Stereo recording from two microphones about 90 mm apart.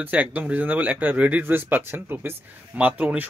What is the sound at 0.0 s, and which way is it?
Speech, 20° right (ahead or behind).